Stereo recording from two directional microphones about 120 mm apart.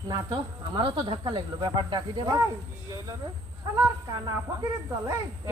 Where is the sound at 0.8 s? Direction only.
40° right (ahead or behind).